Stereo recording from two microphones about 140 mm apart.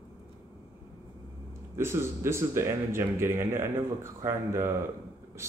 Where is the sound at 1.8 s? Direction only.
20° right (ahead or behind).